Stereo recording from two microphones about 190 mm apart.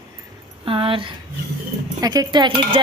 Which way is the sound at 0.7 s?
30° right (ahead or behind).